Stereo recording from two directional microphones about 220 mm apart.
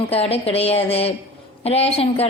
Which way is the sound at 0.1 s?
25° left (ahead or behind).